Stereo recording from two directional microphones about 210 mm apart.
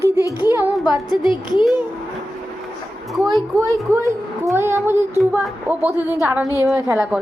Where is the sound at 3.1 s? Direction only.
Centre (ahead or behind).